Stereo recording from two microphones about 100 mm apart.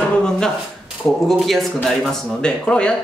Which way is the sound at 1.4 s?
Centre (ahead or behind).